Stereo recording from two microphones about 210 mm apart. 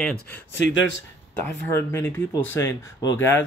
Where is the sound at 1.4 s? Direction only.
10° left (ahead or behind).